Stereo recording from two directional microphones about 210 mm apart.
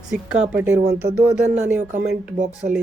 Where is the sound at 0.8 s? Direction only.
50° right (ahead or behind).